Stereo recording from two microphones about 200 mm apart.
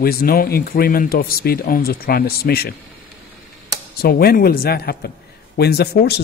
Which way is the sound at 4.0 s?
50° left (ahead or behind).